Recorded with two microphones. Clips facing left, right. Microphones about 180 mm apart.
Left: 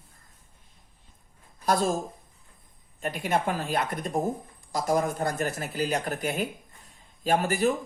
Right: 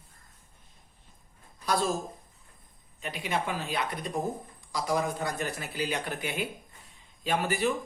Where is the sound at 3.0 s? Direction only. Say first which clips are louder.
Left 5 dB; 50° left (ahead or behind).